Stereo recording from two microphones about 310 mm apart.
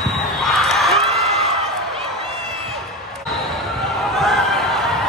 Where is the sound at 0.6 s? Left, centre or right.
Centre.